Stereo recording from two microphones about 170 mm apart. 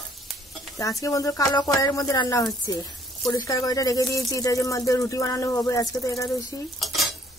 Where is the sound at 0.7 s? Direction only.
20° left (ahead or behind).